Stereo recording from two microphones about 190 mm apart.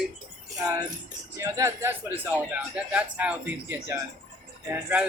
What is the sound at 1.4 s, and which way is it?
Speech, 15° right (ahead or behind).